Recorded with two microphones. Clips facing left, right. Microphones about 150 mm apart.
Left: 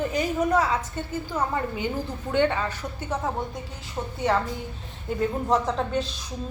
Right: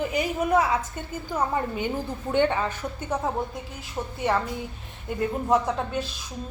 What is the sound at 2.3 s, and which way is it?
Speech, 15° right (ahead or behind).